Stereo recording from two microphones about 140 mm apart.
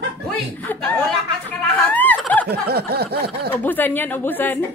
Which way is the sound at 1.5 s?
10° left (ahead or behind).